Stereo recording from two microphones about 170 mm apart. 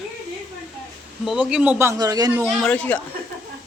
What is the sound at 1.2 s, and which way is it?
Speech, 5° right (ahead or behind).